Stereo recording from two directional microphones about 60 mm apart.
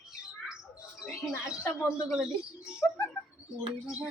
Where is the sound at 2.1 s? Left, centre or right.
Centre.